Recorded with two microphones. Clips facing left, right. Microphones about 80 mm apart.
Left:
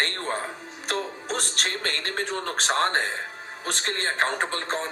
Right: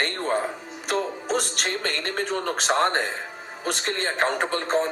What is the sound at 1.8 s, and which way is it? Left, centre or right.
A man's voice, left.